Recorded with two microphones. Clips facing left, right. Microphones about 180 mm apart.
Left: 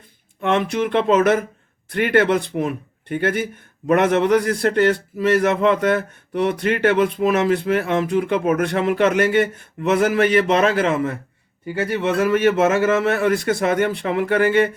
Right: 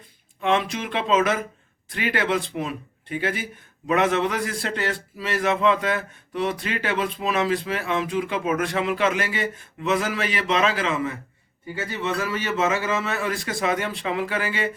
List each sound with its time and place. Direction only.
0.4 s a man's voice: 55° left (ahead or behind)